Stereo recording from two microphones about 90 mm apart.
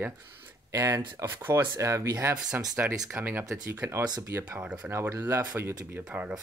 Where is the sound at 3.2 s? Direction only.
20° right (ahead or behind).